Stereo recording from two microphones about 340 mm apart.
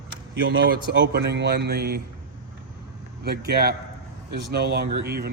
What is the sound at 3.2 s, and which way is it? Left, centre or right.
Speech, right.